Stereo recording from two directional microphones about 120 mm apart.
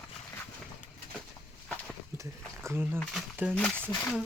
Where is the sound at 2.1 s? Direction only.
25° right (ahead or behind).